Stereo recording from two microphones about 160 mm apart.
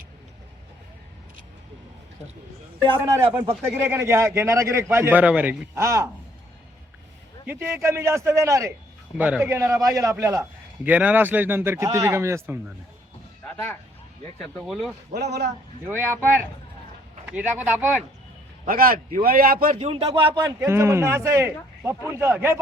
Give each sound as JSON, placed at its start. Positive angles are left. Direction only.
{"t": 3.6, "sound": "a man's voice", "side_deg": -15}
{"t": 7.4, "sound": "a man's voice", "side_deg": -15}
{"t": 13.4, "sound": "a sound", "side_deg": 10}
{"t": 14.3, "sound": "speech", "side_deg": 0}
{"t": 15.1, "sound": "a man's voice", "side_deg": -90}
{"t": 15.9, "sound": "a man's voice", "side_deg": -10}
{"t": 17.3, "sound": "a man's voice", "side_deg": -10}
{"t": 18.6, "sound": "a man's voice", "side_deg": -65}
{"t": 19.8, "sound": "a man's voice", "side_deg": -35}